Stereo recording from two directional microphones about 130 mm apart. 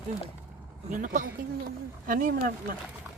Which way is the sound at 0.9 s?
85° right.